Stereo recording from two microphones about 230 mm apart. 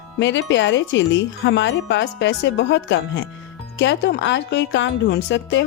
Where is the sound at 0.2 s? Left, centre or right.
Left.